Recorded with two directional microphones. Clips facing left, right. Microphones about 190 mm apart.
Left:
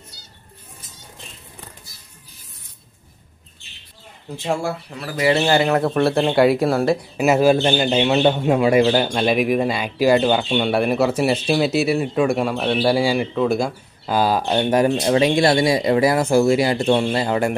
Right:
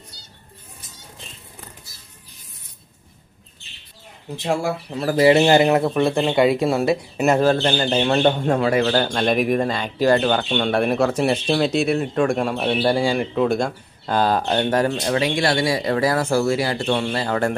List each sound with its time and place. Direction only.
4.9 s speech: 35° right (ahead or behind)
5.3 s speech: 20° right (ahead or behind)
5.8 s speech: centre (ahead or behind)
12.8 s speech: 5° left (ahead or behind)